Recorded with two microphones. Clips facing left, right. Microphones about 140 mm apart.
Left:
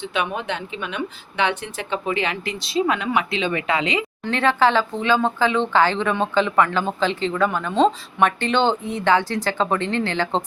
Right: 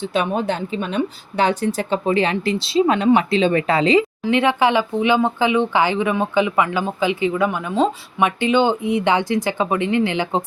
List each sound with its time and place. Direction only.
0.0 s speech: 35° right (ahead or behind)
4.3 s speech: 15° right (ahead or behind)